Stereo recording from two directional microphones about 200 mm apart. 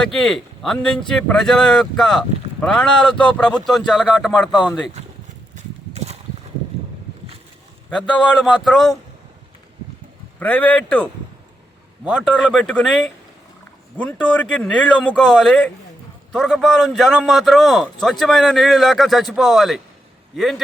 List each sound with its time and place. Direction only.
0.0 s speech: centre (ahead or behind)
5.5 s horse: 35° right (ahead or behind)
7.9 s speech: centre (ahead or behind)
10.4 s a man's voice: 10° left (ahead or behind)
12.1 s a man's voice: 5° left (ahead or behind)